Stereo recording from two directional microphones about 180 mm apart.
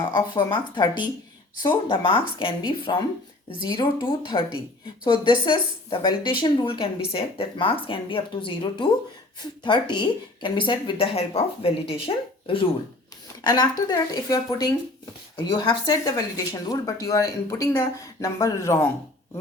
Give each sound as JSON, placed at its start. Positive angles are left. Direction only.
{"t": 0.0, "sound": "speech", "side_deg": 25}